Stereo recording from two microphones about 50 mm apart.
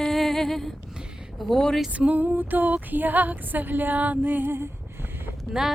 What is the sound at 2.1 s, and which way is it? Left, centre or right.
Music, right.